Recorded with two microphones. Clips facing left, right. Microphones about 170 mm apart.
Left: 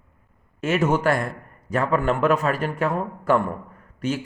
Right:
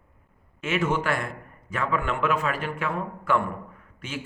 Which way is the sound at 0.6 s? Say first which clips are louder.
Left 5 dB; 40° left (ahead or behind).